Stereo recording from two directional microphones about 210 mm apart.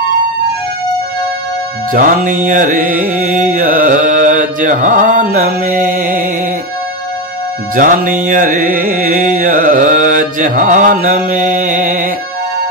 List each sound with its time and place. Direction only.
1.9 s music: 40° right (ahead or behind)
7.7 s music: 40° right (ahead or behind)